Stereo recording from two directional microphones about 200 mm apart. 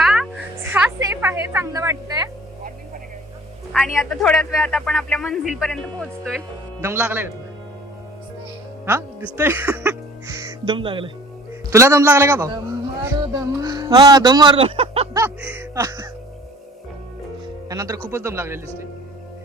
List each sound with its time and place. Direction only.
0.0 s music: centre (ahead or behind)
0.6 s a sound: 10° right (ahead or behind)
3.7 s a man's voice: 5° left (ahead or behind)
6.8 s a man's voice: 10° right (ahead or behind)
8.9 s speech: 10° right (ahead or behind)
11.7 s a man's voice: 15° right (ahead or behind)
15.1 s music: 10° right (ahead or behind)
17.7 s a man's voice: 15° right (ahead or behind)